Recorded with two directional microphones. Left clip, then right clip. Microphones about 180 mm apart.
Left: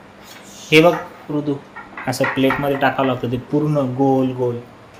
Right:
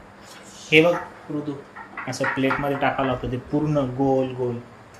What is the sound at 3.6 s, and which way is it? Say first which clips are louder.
Speech: left 4 dB; 10° left (ahead or behind).